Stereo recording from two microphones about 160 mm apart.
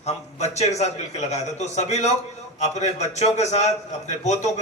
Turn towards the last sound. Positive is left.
turn(degrees=45)  # may be behind; listen again after turning